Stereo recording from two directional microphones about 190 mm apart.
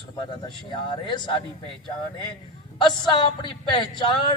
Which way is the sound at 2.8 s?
25° left (ahead or behind).